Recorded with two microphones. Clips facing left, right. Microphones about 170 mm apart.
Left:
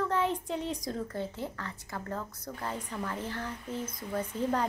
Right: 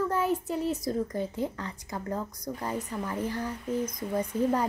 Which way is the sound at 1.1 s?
15° right (ahead or behind).